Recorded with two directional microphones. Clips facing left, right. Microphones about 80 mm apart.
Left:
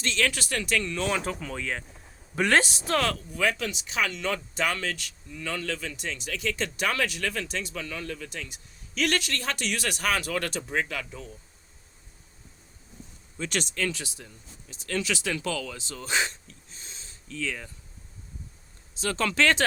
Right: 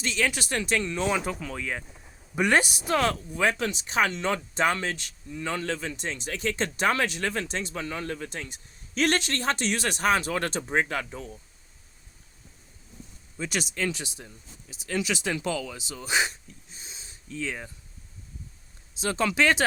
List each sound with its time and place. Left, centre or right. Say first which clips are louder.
0.0 s speech: even; centre
1.2 s speech: even; centre
2.3 s speech: even; centre
3.1 s a man's voice: right 2 dB; right
13.4 s speech: even; centre
18.9 s speech: right 1 dB; centre